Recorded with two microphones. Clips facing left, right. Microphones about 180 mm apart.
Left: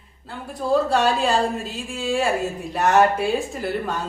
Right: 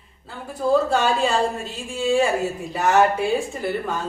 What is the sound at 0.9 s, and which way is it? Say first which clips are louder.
A woman's voice: left 1 dB; centre (ahead or behind).